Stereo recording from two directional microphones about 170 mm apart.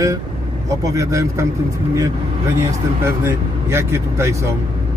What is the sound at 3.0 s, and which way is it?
Speech, 15° right (ahead or behind).